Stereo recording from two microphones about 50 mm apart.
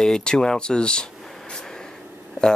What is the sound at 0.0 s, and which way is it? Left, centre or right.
Speech, centre.